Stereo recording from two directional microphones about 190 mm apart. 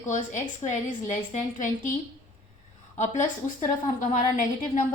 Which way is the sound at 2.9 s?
40° left (ahead or behind).